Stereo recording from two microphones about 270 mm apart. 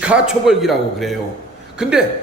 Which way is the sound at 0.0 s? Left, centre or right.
Centre.